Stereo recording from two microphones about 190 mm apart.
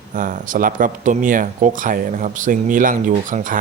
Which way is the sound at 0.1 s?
45° right (ahead or behind).